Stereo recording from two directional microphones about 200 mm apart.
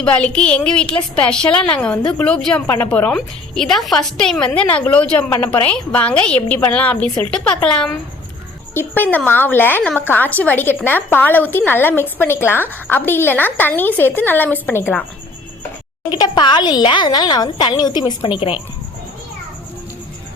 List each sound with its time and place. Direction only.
0.0 s a woman's voice: 5° left (ahead or behind)
16.0 s speech: 20° left (ahead or behind)